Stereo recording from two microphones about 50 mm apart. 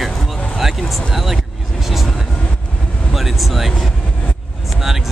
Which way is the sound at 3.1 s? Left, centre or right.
Centre.